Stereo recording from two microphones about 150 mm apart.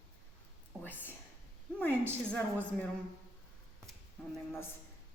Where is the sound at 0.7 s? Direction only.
Centre (ahead or behind).